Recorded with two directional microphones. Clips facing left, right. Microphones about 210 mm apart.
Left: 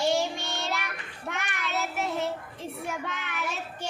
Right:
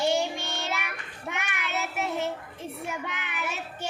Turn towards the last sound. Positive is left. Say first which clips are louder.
# even
turn(degrees=-5)  # may be behind; listen again after turning